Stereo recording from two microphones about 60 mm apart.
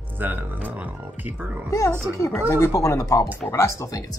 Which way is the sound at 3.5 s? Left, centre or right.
Left.